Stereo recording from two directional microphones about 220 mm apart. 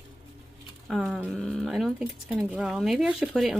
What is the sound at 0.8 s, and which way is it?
Speech, centre (ahead or behind).